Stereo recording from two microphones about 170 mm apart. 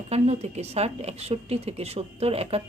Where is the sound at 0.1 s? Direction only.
40° right (ahead or behind).